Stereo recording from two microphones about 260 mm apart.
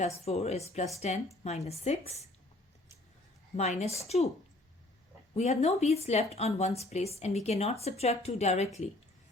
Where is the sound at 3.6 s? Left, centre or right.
Left.